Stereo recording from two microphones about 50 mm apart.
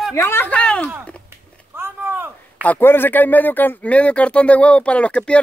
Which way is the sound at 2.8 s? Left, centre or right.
Left.